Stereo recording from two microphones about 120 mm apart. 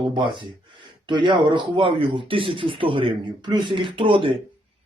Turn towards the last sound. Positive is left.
turn(degrees=-50)  # may be behind; listen again after turning